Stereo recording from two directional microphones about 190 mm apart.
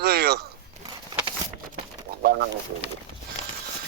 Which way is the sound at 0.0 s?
55° right (ahead or behind).